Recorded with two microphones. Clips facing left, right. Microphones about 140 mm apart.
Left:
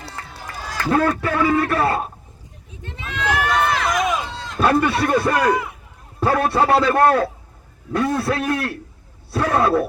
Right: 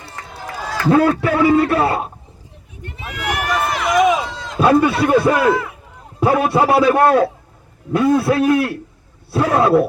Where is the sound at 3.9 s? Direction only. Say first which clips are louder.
Right 7 dB; 60° right (ahead or behind).